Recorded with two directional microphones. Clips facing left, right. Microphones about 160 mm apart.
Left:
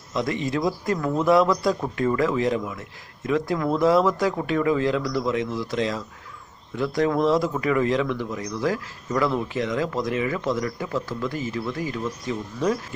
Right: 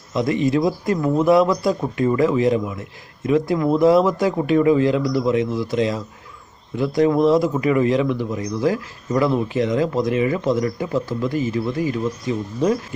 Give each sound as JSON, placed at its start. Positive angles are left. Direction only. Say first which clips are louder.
{"t": 0.1, "sound": "a man's voice", "louder": "right 6 dB", "side_deg": -15}